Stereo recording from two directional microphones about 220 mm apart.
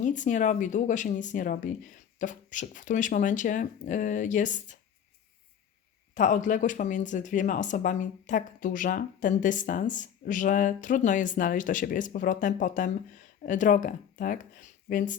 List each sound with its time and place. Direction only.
0.0 s speech: 35° left (ahead or behind)
6.1 s speech: 35° left (ahead or behind)